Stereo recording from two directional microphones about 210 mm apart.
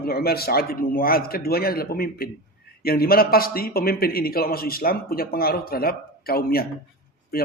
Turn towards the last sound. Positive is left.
turn(degrees=45)  # may be behind; listen again after turning